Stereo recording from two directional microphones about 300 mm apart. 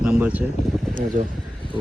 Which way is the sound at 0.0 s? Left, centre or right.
Centre.